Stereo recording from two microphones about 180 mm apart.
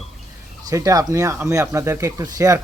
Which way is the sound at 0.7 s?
20° right (ahead or behind).